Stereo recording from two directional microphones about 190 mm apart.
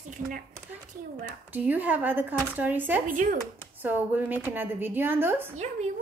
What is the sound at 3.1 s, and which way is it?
Speech, 45° right (ahead or behind).